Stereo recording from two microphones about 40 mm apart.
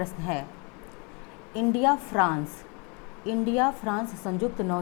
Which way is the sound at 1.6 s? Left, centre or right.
Centre.